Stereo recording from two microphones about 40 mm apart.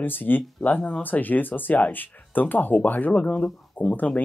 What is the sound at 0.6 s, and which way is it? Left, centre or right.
Speech, left.